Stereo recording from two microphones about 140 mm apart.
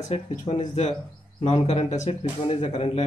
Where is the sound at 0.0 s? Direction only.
50° left (ahead or behind).